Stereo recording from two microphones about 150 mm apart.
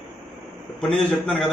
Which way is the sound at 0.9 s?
Centre (ahead or behind).